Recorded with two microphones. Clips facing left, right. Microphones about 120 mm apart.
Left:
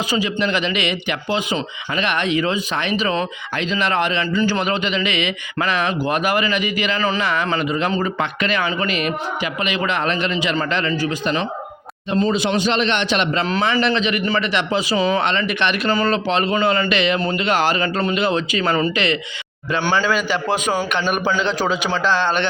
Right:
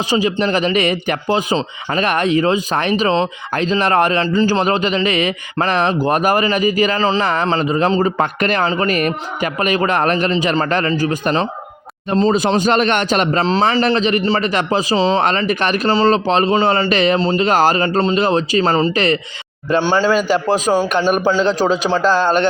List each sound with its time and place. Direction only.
0.1 s a man's voice: 40° right (ahead or behind)
8.2 s speech: 45° right (ahead or behind)
13.5 s a man's voice: 30° right (ahead or behind)
14.9 s speech: 25° right (ahead or behind)
15.2 s a man's voice: 40° right (ahead or behind)